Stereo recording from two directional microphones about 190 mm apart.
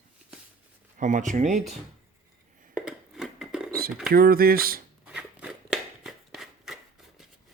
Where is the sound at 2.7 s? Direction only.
Centre (ahead or behind).